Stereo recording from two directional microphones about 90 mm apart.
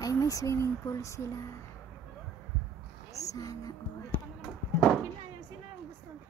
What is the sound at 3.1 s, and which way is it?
Music, 40° left (ahead or behind).